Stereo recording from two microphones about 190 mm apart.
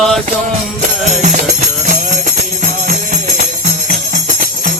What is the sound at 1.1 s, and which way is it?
Music, 40° right (ahead or behind).